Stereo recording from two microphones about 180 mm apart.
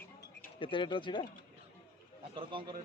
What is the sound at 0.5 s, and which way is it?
Speech, 30° left (ahead or behind).